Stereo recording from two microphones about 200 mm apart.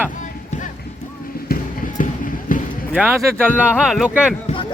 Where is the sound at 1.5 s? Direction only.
40° left (ahead or behind).